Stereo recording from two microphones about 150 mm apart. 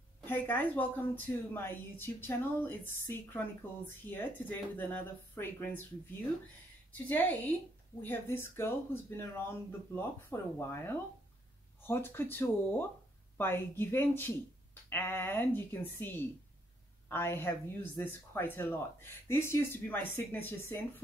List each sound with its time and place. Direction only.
0.3 s a woman's voice: 10° left (ahead or behind)
6.9 s a woman's voice: 10° left (ahead or behind)